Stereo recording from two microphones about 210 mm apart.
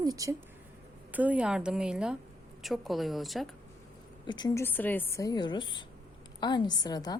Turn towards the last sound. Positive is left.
turn(degrees=20)  # may be behind; listen again after turning